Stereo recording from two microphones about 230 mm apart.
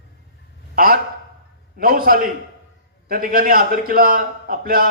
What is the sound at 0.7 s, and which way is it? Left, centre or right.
A man's voice, right.